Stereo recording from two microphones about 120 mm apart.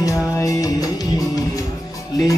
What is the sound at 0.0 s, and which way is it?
Music, 30° left (ahead or behind).